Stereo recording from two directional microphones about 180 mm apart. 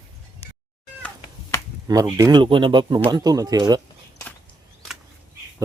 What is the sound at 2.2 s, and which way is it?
A man's voice, 25° right (ahead or behind).